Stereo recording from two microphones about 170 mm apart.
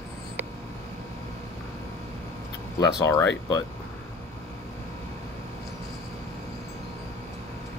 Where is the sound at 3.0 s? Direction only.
15° left (ahead or behind).